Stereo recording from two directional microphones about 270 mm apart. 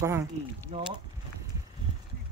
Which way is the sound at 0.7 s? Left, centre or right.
Right.